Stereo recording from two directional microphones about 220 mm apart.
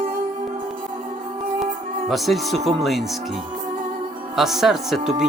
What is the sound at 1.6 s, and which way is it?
Music, centre (ahead or behind).